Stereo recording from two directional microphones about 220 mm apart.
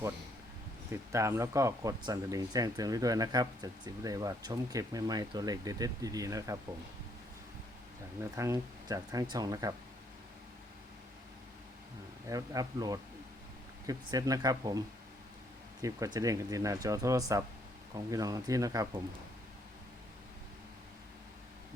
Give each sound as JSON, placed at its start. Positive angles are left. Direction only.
{"t": 0.9, "sound": "speech", "side_deg": -15}
{"t": 8.2, "sound": "speech", "side_deg": -15}
{"t": 12.3, "sound": "speech", "side_deg": -15}